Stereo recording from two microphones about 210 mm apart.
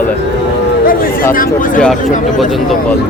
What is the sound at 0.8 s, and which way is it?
Speech, 45° left (ahead or behind).